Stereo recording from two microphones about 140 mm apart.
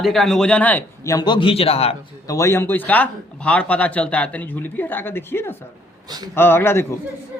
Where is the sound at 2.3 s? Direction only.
20° left (ahead or behind).